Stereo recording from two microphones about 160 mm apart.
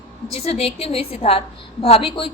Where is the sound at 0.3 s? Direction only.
40° left (ahead or behind).